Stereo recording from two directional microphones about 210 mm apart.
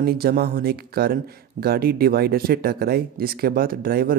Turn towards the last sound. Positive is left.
turn(degrees=-45)  # may be behind; listen again after turning